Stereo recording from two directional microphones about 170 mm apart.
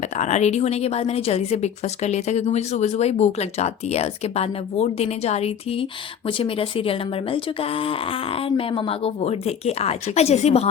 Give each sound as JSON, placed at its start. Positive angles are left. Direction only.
{"t": 0.2, "sound": "a woman's voice", "side_deg": 40}